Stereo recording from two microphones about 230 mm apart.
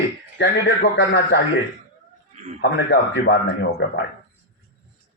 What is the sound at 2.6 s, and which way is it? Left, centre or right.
Speech, left.